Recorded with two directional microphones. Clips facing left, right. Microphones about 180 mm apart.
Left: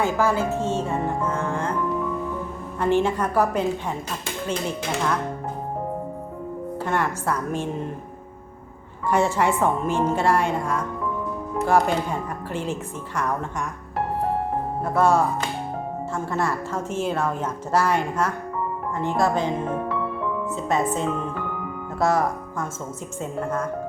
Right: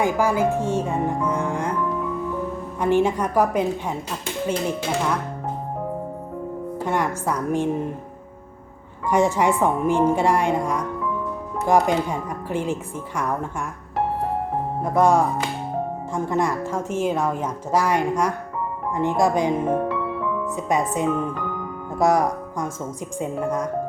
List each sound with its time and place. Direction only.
0.0 s a woman's voice: 15° right (ahead or behind)
2.8 s a woman's voice: 10° right (ahead or behind)
6.7 s a woman's voice: 15° right (ahead or behind)
9.0 s a woman's voice: 15° right (ahead or behind)
14.8 s a woman's voice: 15° right (ahead or behind)
20.6 s a woman's voice: 15° right (ahead or behind)